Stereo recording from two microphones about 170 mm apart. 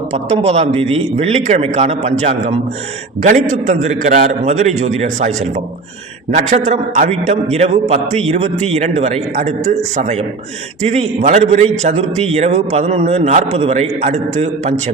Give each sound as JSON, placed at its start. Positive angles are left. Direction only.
{"t": 0.1, "sound": "a man's voice", "side_deg": -40}
{"t": 6.3, "sound": "a man's voice", "side_deg": -45}